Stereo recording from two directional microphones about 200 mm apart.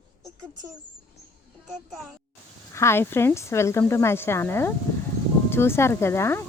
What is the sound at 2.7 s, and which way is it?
Speech, 10° left (ahead or behind).